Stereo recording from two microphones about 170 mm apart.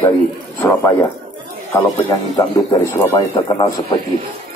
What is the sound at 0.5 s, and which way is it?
A man's voice, 20° left (ahead or behind).